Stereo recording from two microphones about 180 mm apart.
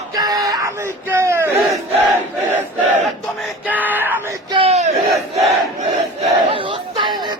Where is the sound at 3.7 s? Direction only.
10° right (ahead or behind).